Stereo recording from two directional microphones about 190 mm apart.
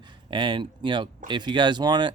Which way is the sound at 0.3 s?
25° right (ahead or behind).